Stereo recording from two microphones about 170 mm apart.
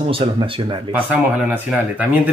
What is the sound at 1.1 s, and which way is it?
Speech, 10° right (ahead or behind).